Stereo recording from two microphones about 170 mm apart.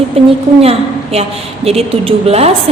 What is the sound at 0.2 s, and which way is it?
A woman's voice, 35° right (ahead or behind).